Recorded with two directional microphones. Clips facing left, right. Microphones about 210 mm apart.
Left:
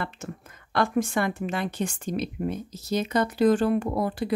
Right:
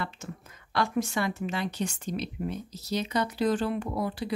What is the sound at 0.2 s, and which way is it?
Speech, 55° left (ahead or behind).